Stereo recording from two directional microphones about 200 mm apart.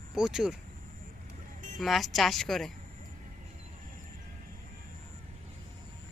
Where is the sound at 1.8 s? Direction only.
Centre (ahead or behind).